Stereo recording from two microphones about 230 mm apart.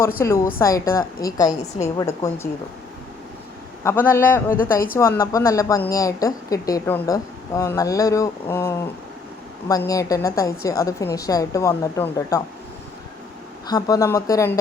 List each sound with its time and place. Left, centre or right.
0.2 s a woman's voice: centre
3.8 s a woman's voice: centre
4.7 s speech: left
4.9 s a woman's voice: centre
13.7 s a woman's voice: centre